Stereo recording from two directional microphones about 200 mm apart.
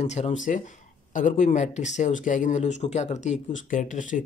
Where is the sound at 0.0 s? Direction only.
35° left (ahead or behind).